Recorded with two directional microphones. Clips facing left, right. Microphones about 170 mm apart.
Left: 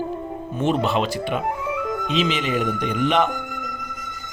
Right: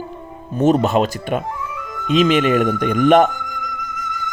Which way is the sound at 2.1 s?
50° right (ahead or behind).